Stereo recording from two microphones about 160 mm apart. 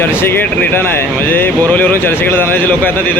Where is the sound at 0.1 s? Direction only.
15° left (ahead or behind).